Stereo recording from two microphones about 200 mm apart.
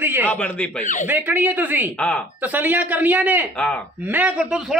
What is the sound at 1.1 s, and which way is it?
Speech, 10° right (ahead or behind).